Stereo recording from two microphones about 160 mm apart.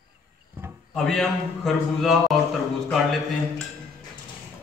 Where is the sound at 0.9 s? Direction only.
Centre (ahead or behind).